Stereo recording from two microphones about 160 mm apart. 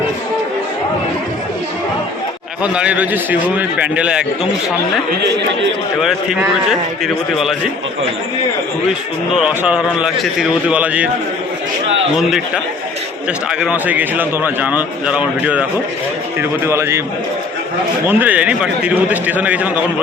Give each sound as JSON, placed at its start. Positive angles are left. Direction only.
{"t": 2.7, "sound": "a man's voice", "side_deg": -10}
{"t": 6.7, "sound": "a man's voice", "side_deg": 0}
{"t": 9.3, "sound": "a man's voice", "side_deg": -5}
{"t": 13.5, "sound": "a man's voice", "side_deg": -5}
{"t": 18.1, "sound": "a man's voice", "side_deg": -10}